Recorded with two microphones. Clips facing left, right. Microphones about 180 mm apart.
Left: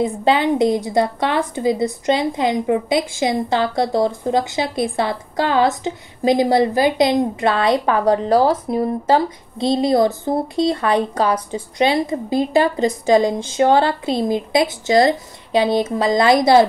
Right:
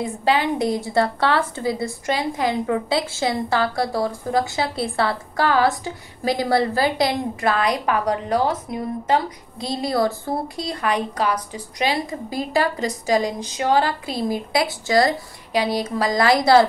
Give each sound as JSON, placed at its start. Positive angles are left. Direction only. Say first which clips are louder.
{"t": 0.0, "sound": "a woman's voice", "louder": "left 4 dB", "side_deg": 25}